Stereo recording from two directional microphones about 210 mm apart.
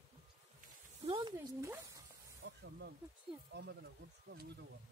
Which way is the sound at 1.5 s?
10° right (ahead or behind).